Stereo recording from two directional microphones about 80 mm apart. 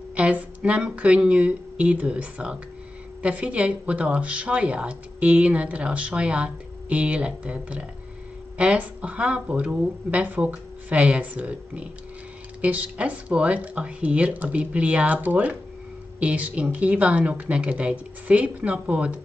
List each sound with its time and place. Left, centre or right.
0.1 s speech: centre